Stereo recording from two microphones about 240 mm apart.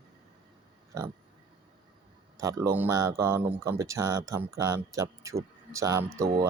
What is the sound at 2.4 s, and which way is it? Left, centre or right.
Speech, centre.